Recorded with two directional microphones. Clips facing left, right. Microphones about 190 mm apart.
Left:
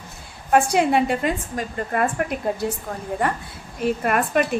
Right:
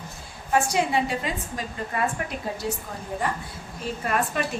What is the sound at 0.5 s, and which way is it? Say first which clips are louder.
A woman's voice: left 5 dB; 60° left (ahead or behind).